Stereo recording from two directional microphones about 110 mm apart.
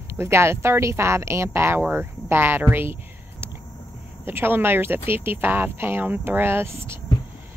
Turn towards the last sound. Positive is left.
turn(degrees=-25)  # may be behind; listen again after turning